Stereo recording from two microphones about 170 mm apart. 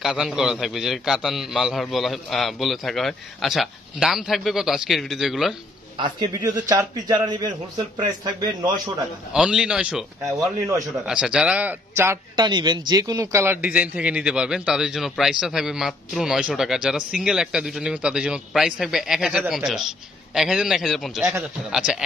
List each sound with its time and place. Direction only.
0.0 s a man's voice: centre (ahead or behind)
5.9 s a man's voice: 25° right (ahead or behind)
9.3 s a man's voice: 5° right (ahead or behind)
11.1 s a man's voice: 5° right (ahead or behind)
12.4 s a man's voice: 25° right (ahead or behind); by 21.9 s centre (ahead or behind)